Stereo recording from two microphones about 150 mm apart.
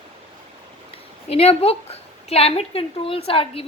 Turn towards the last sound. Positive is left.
turn(degrees=40)  # may be behind; listen again after turning